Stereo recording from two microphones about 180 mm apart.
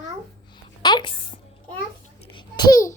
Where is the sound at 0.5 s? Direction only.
25° left (ahead or behind).